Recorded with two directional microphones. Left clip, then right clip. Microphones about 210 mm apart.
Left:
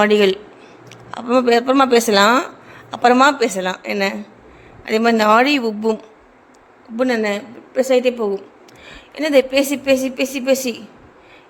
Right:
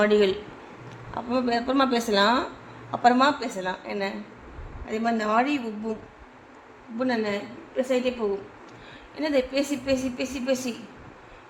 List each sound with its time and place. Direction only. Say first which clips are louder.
0.0 s speech: left 7 dB; 30° left (ahead or behind)
7.0 s speech: left 8 dB; 35° left (ahead or behind)